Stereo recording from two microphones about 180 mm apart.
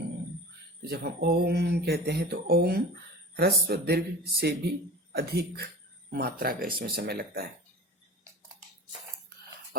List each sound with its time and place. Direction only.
0.8 s speech: 60° right (ahead or behind)